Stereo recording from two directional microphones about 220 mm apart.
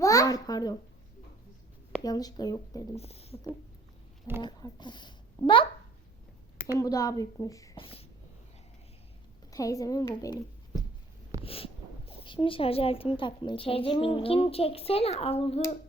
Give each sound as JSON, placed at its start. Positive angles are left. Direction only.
{"t": 0.0, "sound": "a child's voice", "side_deg": 15}
{"t": 2.0, "sound": "a woman's voice", "side_deg": 15}
{"t": 2.9, "sound": "a child's voice", "side_deg": 25}
{"t": 4.4, "sound": "a child's voice", "side_deg": 20}
{"t": 6.7, "sound": "a woman's voice", "side_deg": 15}
{"t": 9.5, "sound": "a woman's voice", "side_deg": 15}
{"t": 11.4, "sound": "a child's voice", "side_deg": 25}